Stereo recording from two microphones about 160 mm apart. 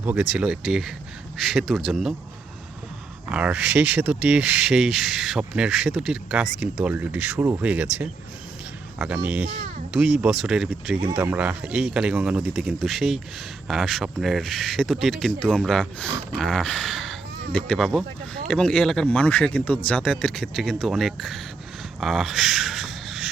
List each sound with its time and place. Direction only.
0.0 s speech: 10° right (ahead or behind)
3.2 s speech: 5° right (ahead or behind)
9.5 s speech: 40° right (ahead or behind)
9.9 s speech: 5° right (ahead or behind)
22.0 s a sound: centre (ahead or behind)